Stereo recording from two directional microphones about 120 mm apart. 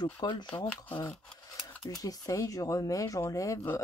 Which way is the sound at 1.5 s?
30° left (ahead or behind).